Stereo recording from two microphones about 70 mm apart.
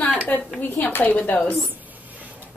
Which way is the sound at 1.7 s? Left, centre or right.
Right.